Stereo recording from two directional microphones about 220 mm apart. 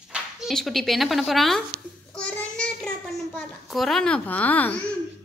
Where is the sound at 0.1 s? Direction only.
Centre (ahead or behind).